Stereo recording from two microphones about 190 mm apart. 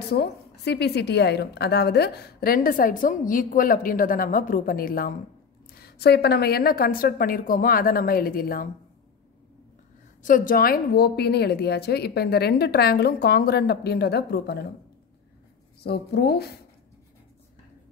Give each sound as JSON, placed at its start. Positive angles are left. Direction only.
{"t": 0.1, "sound": "a woman's voice", "side_deg": 60}
{"t": 10.2, "sound": "a woman's voice", "side_deg": 45}
{"t": 15.8, "sound": "a woman's voice", "side_deg": 55}